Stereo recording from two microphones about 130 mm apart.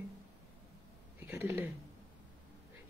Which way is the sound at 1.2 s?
20° right (ahead or behind).